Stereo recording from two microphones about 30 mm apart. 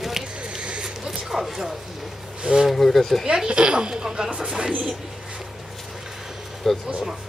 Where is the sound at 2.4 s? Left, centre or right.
Right.